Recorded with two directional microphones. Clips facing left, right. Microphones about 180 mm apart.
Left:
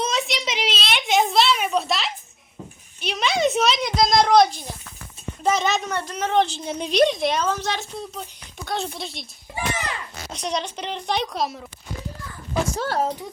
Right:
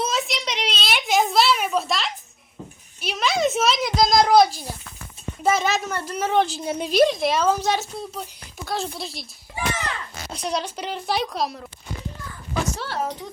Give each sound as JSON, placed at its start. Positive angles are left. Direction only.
{"t": 0.0, "sound": "a sound", "side_deg": 0}
{"t": 3.0, "sound": "a child's voice", "side_deg": 0}
{"t": 10.3, "sound": "a woman's voice", "side_deg": -5}
{"t": 12.7, "sound": "speech", "side_deg": 45}